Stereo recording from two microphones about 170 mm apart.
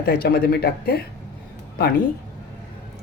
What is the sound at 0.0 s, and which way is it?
Speech, 65° left (ahead or behind).